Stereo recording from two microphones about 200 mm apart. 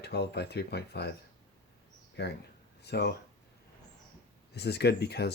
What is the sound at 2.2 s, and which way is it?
Speech, 55° left (ahead or behind).